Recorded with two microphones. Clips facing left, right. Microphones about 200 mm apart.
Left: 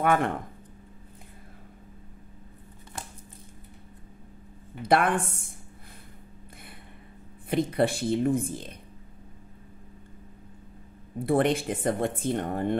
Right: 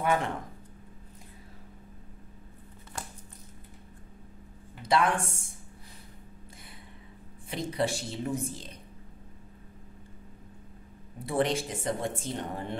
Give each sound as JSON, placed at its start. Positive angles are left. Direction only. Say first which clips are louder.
{"t": 0.0, "sound": "speech", "louder": "left 4 dB", "side_deg": 55}
{"t": 4.8, "sound": "speech", "louder": "left 3 dB", "side_deg": 55}
{"t": 7.4, "sound": "speech", "louder": "left 6 dB", "side_deg": 55}
{"t": 11.1, "sound": "speech", "louder": "left 5 dB", "side_deg": 55}